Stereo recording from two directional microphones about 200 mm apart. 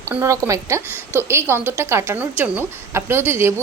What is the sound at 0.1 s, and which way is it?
A woman's voice, 15° right (ahead or behind).